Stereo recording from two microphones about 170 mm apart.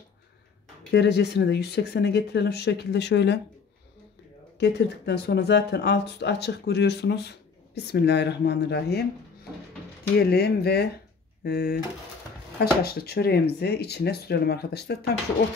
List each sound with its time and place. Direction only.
0.9 s speech: 80° left
4.6 s speech: 80° left
10.1 s speech: 70° left (ahead or behind)